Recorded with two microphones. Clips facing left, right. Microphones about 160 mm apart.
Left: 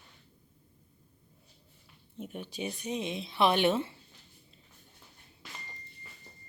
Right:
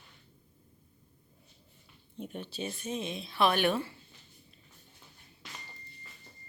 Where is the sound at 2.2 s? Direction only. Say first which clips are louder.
Even; 5° left (ahead or behind); by 4.0 s 25° left (ahead or behind).